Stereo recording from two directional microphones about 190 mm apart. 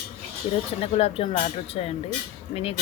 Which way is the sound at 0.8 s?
30° left (ahead or behind).